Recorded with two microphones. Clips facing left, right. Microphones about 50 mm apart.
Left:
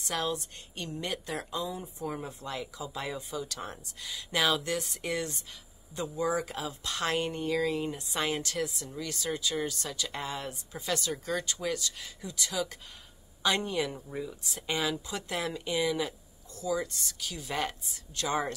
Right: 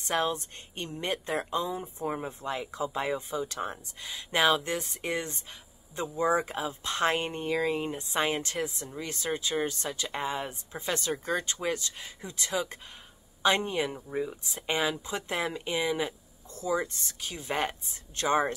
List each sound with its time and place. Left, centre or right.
0.0 s speech: right